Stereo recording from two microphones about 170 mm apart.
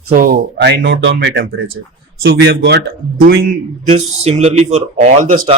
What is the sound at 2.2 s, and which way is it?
Speech, 65° right (ahead or behind).